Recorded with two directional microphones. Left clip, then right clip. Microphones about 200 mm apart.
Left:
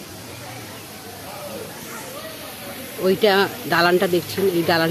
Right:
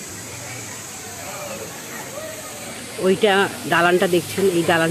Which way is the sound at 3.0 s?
Centre (ahead or behind).